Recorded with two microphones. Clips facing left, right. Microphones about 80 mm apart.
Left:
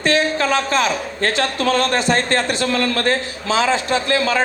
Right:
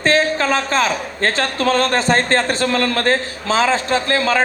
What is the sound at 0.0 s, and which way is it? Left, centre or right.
A man's voice, right.